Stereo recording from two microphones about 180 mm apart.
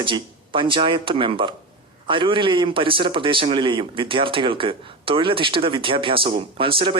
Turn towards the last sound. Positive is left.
turn(degrees=-30)  # may be behind; listen again after turning